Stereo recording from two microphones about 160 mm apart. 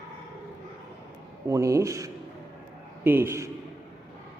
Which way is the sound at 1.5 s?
20° right (ahead or behind).